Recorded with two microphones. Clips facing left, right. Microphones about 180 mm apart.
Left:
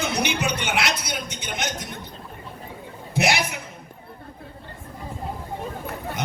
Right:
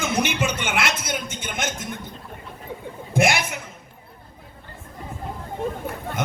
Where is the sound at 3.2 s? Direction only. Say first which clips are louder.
Right 2 dB; 50° right (ahead or behind).